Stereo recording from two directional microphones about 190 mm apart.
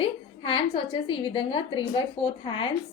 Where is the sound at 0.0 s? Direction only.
25° left (ahead or behind).